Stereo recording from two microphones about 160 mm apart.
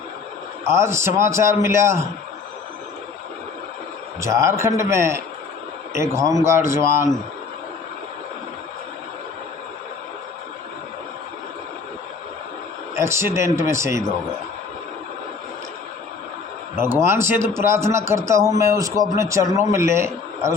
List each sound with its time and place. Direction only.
0.6 s a man's voice: 15° right (ahead or behind)
4.2 s a man's voice: 20° right (ahead or behind)
13.0 s a man's voice: 15° right (ahead or behind)
16.7 s a man's voice: 15° right (ahead or behind)